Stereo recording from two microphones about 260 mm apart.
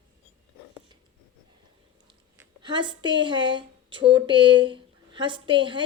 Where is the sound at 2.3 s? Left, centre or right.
Centre.